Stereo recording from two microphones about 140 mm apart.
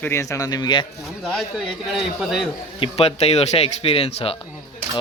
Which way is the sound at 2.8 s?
45° left (ahead or behind).